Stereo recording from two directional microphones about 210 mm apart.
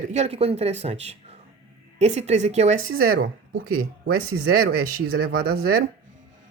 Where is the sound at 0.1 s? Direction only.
30° right (ahead or behind).